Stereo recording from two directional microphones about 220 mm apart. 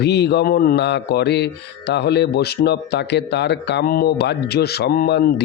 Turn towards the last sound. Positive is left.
turn(degrees=45)  # may be behind; listen again after turning